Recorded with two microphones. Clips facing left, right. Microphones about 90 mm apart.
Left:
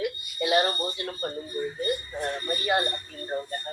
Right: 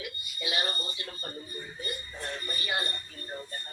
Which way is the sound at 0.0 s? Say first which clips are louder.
Left 10 dB; 55° left (ahead or behind).